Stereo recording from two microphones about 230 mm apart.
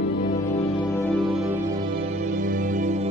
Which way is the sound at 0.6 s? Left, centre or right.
Centre.